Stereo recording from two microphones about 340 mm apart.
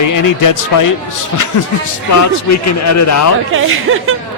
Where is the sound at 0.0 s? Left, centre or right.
Left.